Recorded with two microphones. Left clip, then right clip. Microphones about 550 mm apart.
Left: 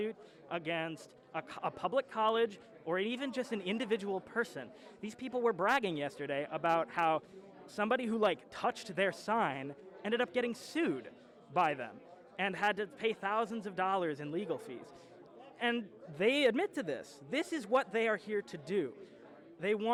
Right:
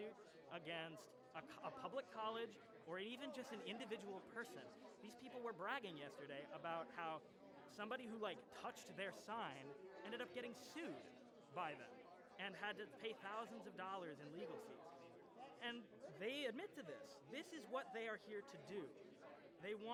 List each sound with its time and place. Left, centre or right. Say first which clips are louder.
0.0 s a man's voice: left 15 dB; left
15.5 s a man's voice: left 18 dB; left